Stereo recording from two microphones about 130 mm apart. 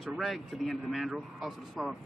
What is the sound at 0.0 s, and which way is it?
A man's voice, centre (ahead or behind).